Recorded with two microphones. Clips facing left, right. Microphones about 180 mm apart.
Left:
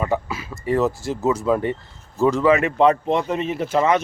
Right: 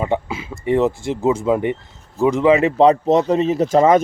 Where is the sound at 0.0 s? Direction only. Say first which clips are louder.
Right 2 dB; 25° right (ahead or behind).